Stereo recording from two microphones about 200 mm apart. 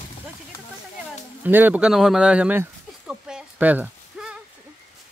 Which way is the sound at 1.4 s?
10° right (ahead or behind).